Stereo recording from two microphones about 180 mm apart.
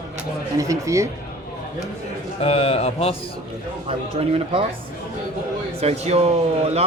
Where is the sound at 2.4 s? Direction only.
35° left (ahead or behind).